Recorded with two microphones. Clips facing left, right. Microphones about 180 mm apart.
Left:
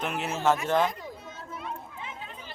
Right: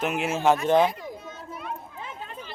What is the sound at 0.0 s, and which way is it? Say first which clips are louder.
Speech: right 4 dB; 10° right (ahead or behind).